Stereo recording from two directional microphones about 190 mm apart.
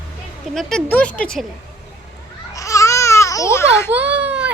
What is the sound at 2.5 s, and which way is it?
Babbling, 15° left (ahead or behind).